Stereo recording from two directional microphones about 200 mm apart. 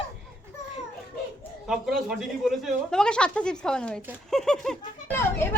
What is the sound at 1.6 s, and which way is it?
A child's voice, 5° right (ahead or behind).